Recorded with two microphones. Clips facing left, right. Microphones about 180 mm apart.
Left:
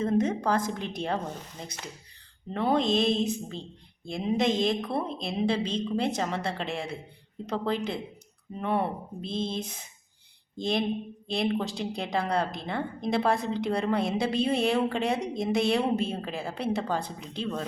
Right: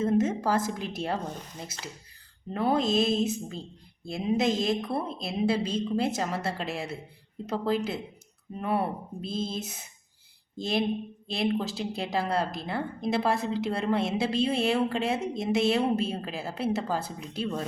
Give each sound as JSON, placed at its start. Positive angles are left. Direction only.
{"t": 0.0, "sound": "a woman's voice", "side_deg": -5}